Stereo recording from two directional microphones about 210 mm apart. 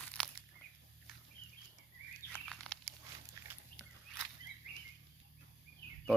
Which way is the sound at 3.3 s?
10° right (ahead or behind).